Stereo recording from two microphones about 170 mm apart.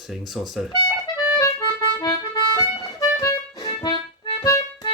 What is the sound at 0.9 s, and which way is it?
Accordion, 25° left (ahead or behind).